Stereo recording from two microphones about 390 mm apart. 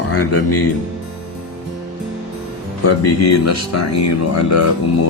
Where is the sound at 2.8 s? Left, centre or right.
Left.